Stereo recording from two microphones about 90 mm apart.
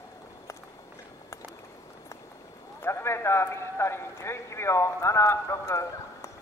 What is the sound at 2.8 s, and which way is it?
A man's voice, 30° left (ahead or behind).